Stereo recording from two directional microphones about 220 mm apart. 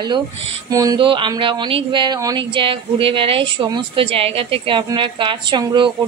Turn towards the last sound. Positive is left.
turn(degrees=-20)  # may be behind; listen again after turning